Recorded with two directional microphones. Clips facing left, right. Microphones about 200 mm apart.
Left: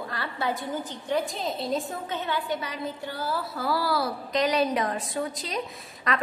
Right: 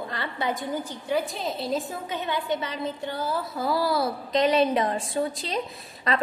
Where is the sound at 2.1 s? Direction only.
15° right (ahead or behind).